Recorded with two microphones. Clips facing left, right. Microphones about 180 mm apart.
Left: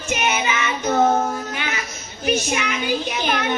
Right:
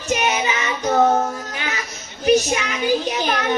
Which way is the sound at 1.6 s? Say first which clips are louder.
Even; 35° right (ahead or behind).